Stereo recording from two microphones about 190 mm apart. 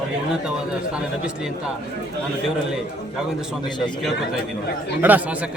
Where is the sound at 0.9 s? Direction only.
5° right (ahead or behind).